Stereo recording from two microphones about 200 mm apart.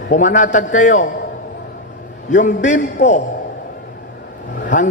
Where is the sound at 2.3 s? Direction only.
40° left (ahead or behind).